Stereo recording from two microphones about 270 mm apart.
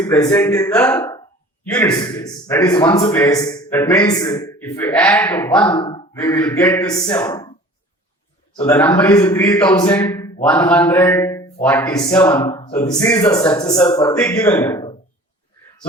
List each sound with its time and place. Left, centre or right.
0.0 s a man's voice: centre
5.7 s speech: centre
6.1 s a man's voice: centre
8.6 s a man's voice: centre